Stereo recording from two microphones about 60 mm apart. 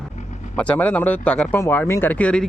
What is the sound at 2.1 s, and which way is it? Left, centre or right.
Speech, left.